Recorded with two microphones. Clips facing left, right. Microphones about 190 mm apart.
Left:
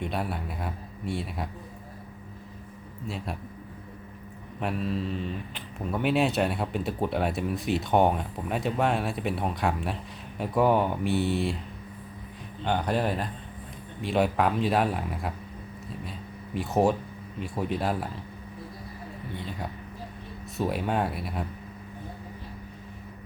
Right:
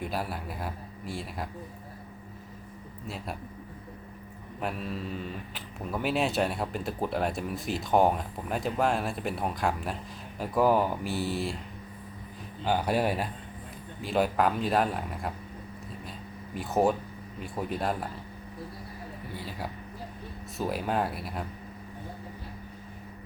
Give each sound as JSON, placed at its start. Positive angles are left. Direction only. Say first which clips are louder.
{"t": 0.0, "sound": "speech", "louder": "left 2 dB", "side_deg": 0}
{"t": 4.6, "sound": "speech", "louder": "left 4 dB", "side_deg": 0}
{"t": 12.6, "sound": "speech", "louder": "even", "side_deg": -5}
{"t": 16.6, "sound": "speech", "louder": "left 2 dB", "side_deg": 0}
{"t": 19.3, "sound": "speech", "louder": "left 2 dB", "side_deg": -5}